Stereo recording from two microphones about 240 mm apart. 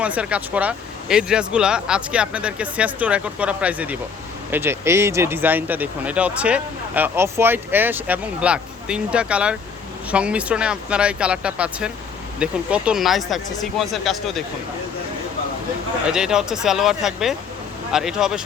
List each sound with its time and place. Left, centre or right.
0.0 s speech: centre
16.0 s speech: centre